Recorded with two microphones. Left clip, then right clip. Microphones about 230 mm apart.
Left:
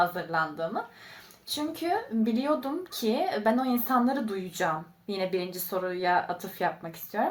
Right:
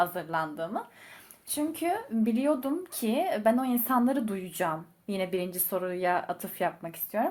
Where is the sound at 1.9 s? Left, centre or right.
Right.